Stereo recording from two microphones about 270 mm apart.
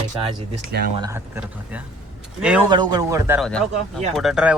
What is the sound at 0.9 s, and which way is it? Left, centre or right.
Speech, centre.